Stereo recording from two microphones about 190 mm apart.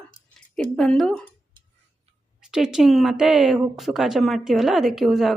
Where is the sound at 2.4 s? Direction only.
5° right (ahead or behind).